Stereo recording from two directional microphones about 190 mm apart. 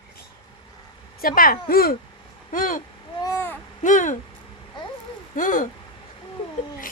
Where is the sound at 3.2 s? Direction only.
15° left (ahead or behind).